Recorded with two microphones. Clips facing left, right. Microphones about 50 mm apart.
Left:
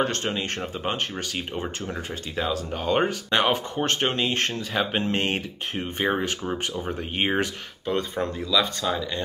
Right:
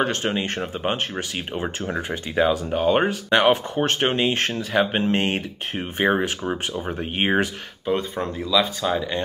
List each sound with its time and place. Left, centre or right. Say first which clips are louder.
0.0 s speech: right 3 dB; centre
8.8 s speech: right 4 dB; centre